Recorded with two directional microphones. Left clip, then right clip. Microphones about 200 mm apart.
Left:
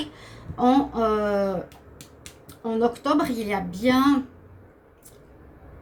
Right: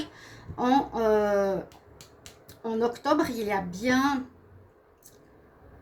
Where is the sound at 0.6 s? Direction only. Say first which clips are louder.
Left 3 dB; 45° right (ahead or behind).